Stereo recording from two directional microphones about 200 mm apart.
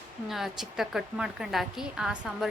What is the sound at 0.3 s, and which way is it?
A woman's voice, centre (ahead or behind).